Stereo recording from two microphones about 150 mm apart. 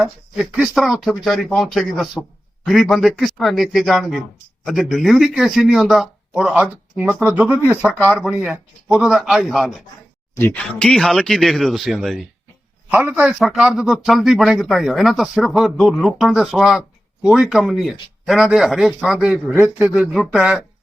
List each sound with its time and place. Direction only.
0.0 s a man's voice: 5° right (ahead or behind)
10.3 s speech: 15° left (ahead or behind)
10.6 s a man's voice: 5° left (ahead or behind)